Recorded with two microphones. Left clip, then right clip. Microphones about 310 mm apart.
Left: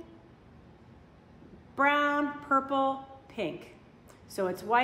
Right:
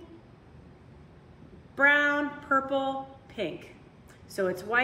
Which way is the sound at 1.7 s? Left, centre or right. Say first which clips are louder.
Right 3 dB; centre.